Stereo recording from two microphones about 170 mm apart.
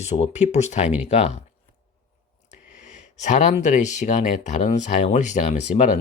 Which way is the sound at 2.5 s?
45° left (ahead or behind).